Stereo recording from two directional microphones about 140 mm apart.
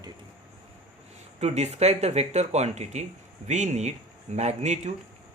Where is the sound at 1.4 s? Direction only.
50° right (ahead or behind).